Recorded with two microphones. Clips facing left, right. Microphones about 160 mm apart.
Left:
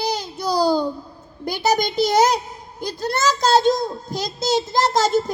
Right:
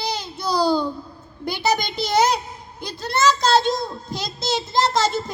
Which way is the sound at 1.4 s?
45° left (ahead or behind).